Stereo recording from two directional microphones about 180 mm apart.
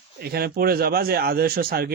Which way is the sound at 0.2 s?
60° right (ahead or behind).